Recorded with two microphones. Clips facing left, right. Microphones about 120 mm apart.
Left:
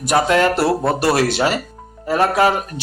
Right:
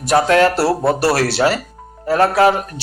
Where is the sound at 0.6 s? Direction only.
5° right (ahead or behind).